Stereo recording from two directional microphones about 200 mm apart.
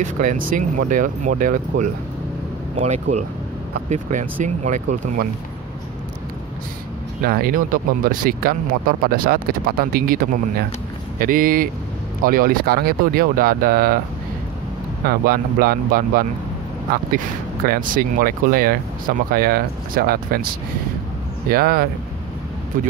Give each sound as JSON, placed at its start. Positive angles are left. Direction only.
{"t": 0.0, "sound": "speech", "side_deg": -40}
{"t": 7.2, "sound": "speech", "side_deg": -45}
{"t": 15.0, "sound": "speech", "side_deg": -45}
{"t": 17.6, "sound": "speech", "side_deg": -45}